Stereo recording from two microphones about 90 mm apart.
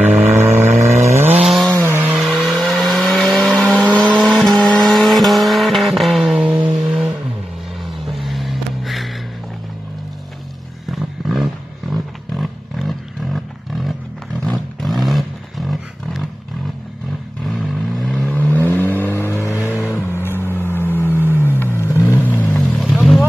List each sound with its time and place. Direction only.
0.0 s vehicle: 20° right (ahead or behind)
1.4 s chainsaw: 5° right (ahead or behind)
1.8 s a sound: 25° right (ahead or behind)
2.1 s vehicle: centre (ahead or behind)
7.8 s vehicle: centre (ahead or behind)
10.9 s a sound: centre (ahead or behind)
11.9 s roaring cats: centre (ahead or behind)
14.4 s a sound: 5° left (ahead or behind)
17.4 s vehicle: centre (ahead or behind); by 22.6 s 20° left (ahead or behind)